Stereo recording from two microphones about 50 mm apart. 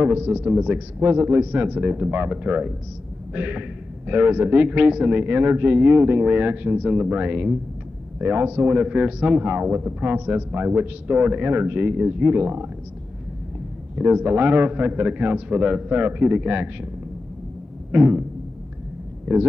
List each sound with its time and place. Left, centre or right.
0.0 s a man's voice: right
1.0 s a man's voice: right
11.1 s a man's voice: right
13.9 s a man's voice: right
17.9 s a man's voice: right
19.3 s a man's voice: right